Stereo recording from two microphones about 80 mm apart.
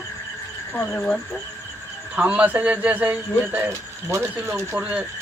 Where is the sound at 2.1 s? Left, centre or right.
Centre.